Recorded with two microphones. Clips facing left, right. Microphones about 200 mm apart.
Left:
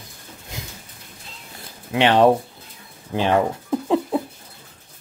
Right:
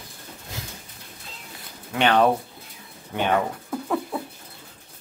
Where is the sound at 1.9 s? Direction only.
25° left (ahead or behind).